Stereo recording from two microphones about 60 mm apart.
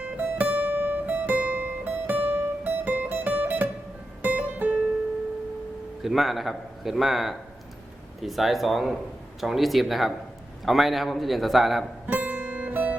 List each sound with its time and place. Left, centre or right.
0.0 s music: right
6.0 s a man's voice: centre
12.0 s music: right